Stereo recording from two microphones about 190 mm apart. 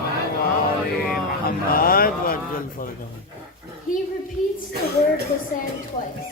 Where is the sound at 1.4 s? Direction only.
50° left (ahead or behind).